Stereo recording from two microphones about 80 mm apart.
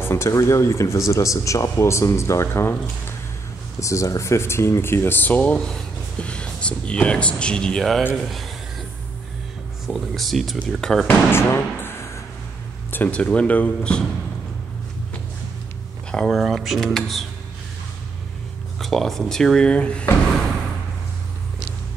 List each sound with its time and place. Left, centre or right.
0.0 s speech: left
3.8 s speech: left; by 8.5 s centre
9.8 s speech: centre
11.1 s speech: left
12.9 s speech: centre
16.1 s speech: centre
18.8 s speech: centre